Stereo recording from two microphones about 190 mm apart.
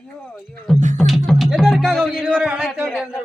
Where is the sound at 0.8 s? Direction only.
40° right (ahead or behind).